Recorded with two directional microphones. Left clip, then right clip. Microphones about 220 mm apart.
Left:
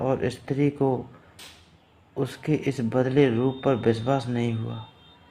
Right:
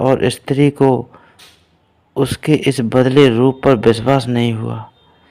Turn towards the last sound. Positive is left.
turn(degrees=-40)  # may be behind; listen again after turning